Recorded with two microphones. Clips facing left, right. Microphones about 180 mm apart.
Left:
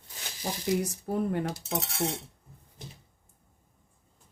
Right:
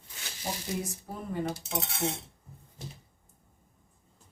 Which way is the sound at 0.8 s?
70° left (ahead or behind).